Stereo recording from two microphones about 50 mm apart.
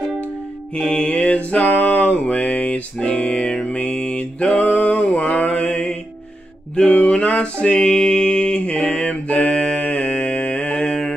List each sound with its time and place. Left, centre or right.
0.7 s music: centre
1.1 s music: left
1.6 s music: left
3.4 s mantra: centre
6.9 s a sound: left
7.6 s mantra: centre